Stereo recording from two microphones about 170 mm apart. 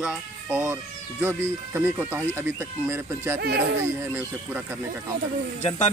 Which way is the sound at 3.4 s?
70° right (ahead or behind).